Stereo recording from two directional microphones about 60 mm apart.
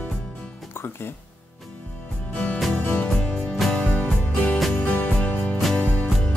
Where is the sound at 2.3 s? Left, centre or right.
Left.